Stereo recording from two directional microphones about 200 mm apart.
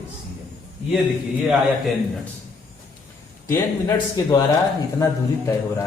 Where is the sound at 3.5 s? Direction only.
15° left (ahead or behind).